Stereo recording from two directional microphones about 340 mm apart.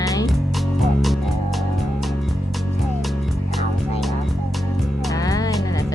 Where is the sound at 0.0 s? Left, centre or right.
Centre.